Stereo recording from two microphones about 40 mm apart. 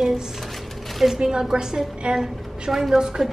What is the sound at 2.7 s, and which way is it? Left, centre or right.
Speech, centre.